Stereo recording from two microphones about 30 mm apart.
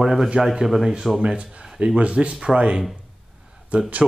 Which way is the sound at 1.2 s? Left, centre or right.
Right.